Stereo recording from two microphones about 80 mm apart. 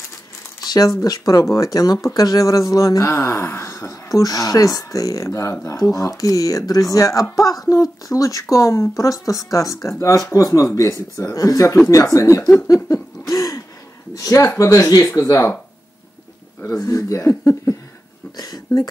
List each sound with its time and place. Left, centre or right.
0.7 s speech: left
13.3 s throat clearing: left
14.1 s speech: left
16.8 s speech: left
18.3 s speech: left